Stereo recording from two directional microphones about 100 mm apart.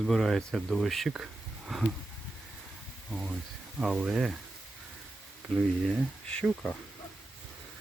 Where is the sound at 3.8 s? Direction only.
5° right (ahead or behind).